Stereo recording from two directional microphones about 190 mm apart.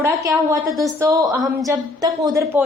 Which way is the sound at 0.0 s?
15° right (ahead or behind).